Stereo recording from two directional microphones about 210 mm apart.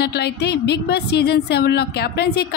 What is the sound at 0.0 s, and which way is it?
A woman's voice, 50° left (ahead or behind).